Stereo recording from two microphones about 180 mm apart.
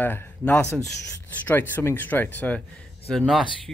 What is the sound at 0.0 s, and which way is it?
Speech, 10° left (ahead or behind).